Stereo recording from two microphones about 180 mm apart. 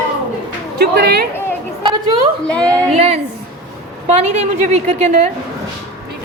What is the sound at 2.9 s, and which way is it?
A woman's voice, 35° right (ahead or behind).